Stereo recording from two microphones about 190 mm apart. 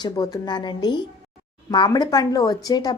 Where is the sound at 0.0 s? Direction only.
20° left (ahead or behind).